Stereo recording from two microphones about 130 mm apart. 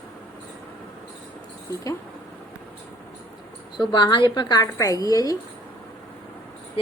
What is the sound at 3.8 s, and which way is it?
A woman's voice, 35° left (ahead or behind).